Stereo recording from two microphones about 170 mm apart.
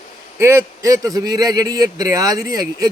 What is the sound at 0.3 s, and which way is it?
A man's voice, 15° right (ahead or behind).